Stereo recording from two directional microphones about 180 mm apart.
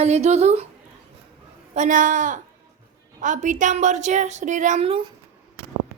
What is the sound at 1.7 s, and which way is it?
Speech, 45° right (ahead or behind).